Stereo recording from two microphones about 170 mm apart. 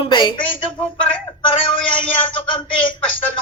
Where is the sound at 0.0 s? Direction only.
25° left (ahead or behind).